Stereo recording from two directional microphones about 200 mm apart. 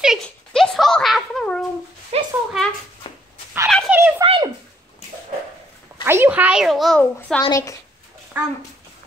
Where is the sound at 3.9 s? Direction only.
10° right (ahead or behind).